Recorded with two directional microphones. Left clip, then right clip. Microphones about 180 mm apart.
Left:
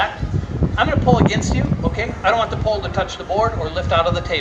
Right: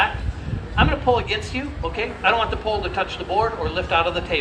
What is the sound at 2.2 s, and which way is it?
A man's voice, 40° left (ahead or behind).